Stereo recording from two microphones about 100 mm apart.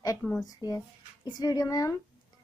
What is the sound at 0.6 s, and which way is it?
Speech, 30° right (ahead or behind).